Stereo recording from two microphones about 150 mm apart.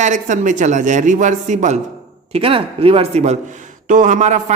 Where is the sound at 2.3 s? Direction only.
40° right (ahead or behind).